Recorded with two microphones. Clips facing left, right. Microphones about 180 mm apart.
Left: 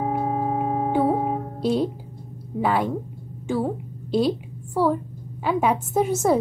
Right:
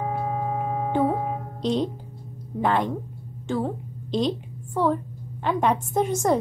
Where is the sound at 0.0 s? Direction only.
30° left (ahead or behind).